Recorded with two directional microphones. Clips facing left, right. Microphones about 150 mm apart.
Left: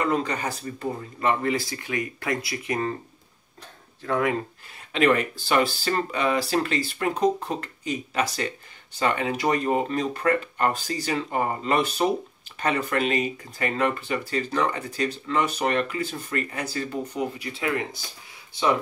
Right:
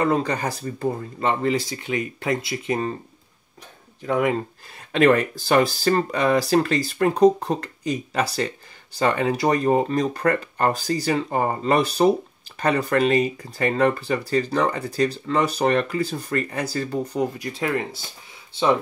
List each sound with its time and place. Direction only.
0.0 s speech: 35° right (ahead or behind)
4.0 s speech: 20° right (ahead or behind)
4.9 s speech: 40° right (ahead or behind)